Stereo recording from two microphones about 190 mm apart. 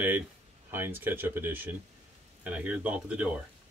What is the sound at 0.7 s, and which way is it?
Speech, 10° right (ahead or behind).